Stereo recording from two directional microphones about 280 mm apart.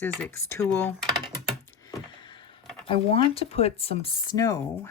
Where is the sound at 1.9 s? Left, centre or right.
Centre.